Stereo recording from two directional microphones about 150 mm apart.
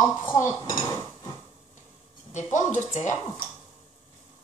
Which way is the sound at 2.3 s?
60° left (ahead or behind).